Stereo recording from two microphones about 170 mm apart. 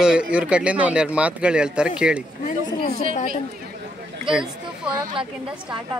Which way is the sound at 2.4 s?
50° left (ahead or behind).